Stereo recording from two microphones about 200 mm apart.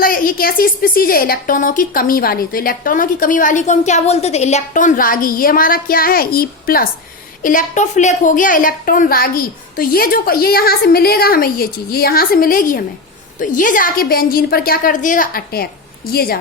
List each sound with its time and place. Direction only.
0.0 s a woman's voice: 45° left (ahead or behind)